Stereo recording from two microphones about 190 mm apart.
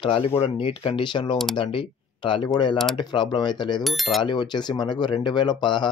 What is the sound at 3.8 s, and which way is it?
Speech, centre (ahead or behind).